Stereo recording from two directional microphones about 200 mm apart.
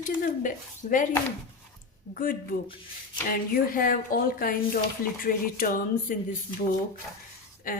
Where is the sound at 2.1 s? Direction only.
45° left (ahead or behind).